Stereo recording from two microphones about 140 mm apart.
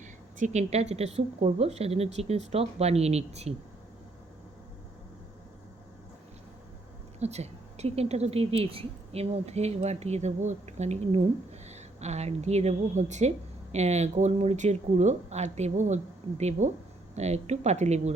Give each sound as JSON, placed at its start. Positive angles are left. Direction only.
{"t": 0.3, "sound": "a woman's voice", "side_deg": -55}
{"t": 7.2, "sound": "a woman's voice", "side_deg": -50}